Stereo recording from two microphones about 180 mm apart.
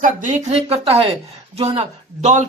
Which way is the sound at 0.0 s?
40° right (ahead or behind).